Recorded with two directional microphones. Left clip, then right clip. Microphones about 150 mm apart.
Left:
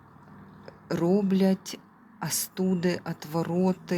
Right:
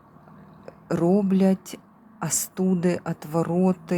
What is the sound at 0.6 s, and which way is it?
Speech, 25° right (ahead or behind).